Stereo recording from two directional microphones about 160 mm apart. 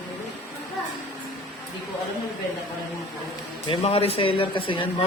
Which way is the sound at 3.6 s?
35° left (ahead or behind).